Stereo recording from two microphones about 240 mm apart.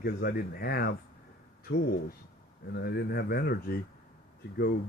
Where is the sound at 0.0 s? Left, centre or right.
Left.